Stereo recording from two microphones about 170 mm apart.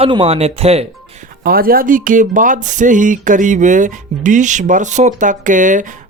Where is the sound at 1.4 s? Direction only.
60° right (ahead or behind).